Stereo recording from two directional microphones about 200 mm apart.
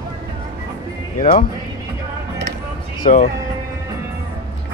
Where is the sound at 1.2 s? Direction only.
40° left (ahead or behind).